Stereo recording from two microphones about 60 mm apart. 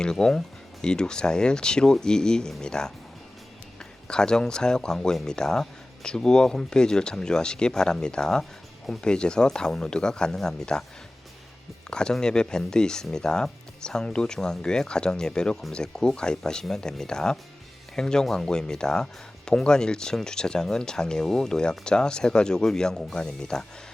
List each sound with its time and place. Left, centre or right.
0.0 s speech: centre
4.1 s speech: centre
11.9 s speech: centre